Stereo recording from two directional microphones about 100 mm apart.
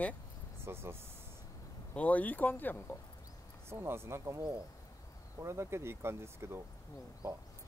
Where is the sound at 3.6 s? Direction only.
25° right (ahead or behind).